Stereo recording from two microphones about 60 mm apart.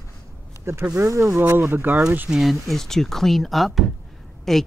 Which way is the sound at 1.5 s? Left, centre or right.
Right.